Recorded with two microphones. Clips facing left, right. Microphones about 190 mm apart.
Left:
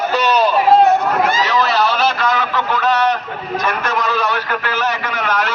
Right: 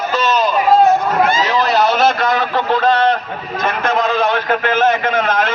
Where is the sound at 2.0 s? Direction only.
50° right (ahead or behind).